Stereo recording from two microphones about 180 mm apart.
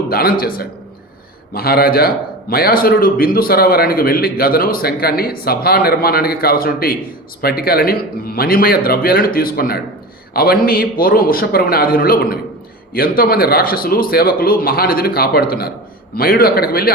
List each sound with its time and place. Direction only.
0.1 s a man's voice: 55° left (ahead or behind)